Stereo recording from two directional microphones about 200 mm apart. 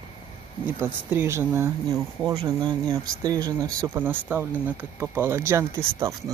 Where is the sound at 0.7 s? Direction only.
10° right (ahead or behind).